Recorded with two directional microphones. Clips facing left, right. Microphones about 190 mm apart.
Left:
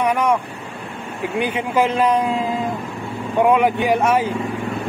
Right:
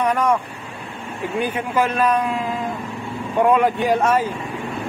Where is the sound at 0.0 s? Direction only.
10° left (ahead or behind).